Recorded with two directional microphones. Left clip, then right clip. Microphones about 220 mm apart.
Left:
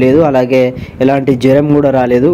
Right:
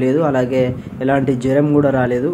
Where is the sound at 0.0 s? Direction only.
30° left (ahead or behind).